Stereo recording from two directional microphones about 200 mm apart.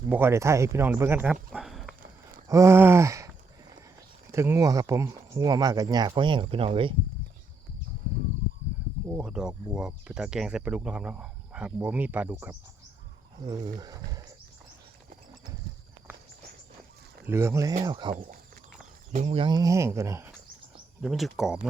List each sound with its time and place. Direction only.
0.1 s speech: 10° right (ahead or behind)
2.5 s a sound: 15° right (ahead or behind)
4.3 s speech: 15° right (ahead or behind)
9.0 s speech: 5° right (ahead or behind)
13.4 s speech: 20° right (ahead or behind)
17.2 s speech: 15° right (ahead or behind)
18.1 s speech: 45° right (ahead or behind)
19.1 s speech: 30° right (ahead or behind); by 20.3 s 15° right (ahead or behind)
21.0 s speech: centre (ahead or behind)